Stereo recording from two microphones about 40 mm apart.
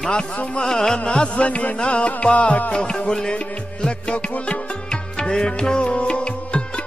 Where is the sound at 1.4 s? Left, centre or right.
Left.